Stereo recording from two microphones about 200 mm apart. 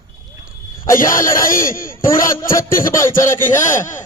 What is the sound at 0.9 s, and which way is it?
Speech, 40° left (ahead or behind).